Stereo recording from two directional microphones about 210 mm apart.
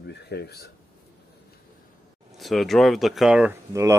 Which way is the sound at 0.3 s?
50° left (ahead or behind).